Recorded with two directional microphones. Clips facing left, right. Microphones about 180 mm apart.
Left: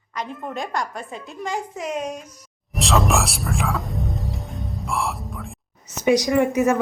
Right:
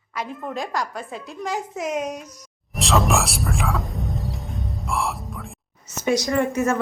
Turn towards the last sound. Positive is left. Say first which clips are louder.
# left 3 dB
turn(degrees=15)  # may be behind; listen again after turning